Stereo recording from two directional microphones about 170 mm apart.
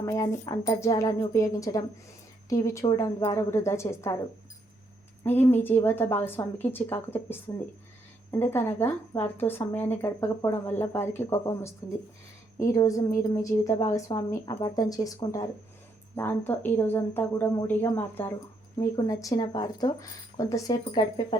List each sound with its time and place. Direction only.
0.0 s a woman's voice: 20° left (ahead or behind)
5.2 s a woman's voice: 10° left (ahead or behind); by 21.3 s 25° left (ahead or behind)